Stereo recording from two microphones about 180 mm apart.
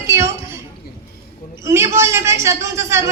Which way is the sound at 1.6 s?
15° right (ahead or behind).